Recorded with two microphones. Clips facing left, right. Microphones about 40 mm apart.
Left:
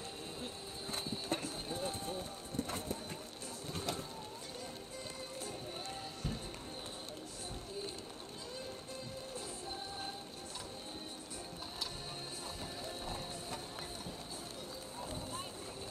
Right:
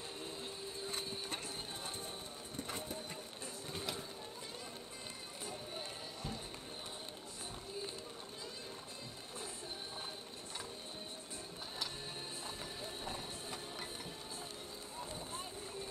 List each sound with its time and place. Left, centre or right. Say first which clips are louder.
0.8 s horse: left 5 dB; centre
1.8 s a sound: left 6 dB; centre
13.0 s ratchet: left 1 dB; centre